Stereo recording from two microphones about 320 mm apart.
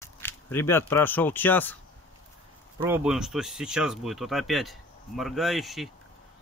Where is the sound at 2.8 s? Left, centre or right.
Centre.